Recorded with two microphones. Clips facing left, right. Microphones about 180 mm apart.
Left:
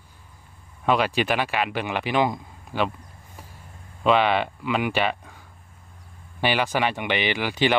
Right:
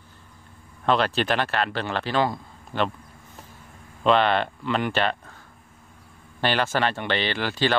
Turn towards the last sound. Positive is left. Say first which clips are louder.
# left 2 dB
turn(degrees=15)  # may be behind; listen again after turning